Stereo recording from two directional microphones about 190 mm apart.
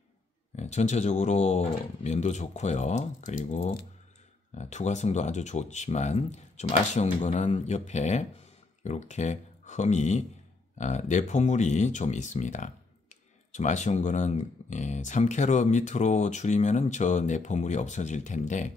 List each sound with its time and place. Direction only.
0.6 s speech: 35° left (ahead or behind)